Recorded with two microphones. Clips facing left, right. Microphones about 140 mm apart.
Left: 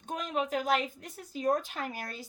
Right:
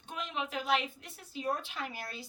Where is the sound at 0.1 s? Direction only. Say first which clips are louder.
Left 6 dB; 45° left (ahead or behind).